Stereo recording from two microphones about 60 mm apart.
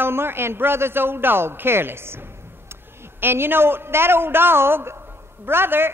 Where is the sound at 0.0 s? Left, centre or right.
Right.